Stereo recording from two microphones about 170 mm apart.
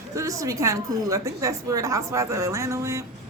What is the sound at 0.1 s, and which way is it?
A woman's voice, 20° right (ahead or behind).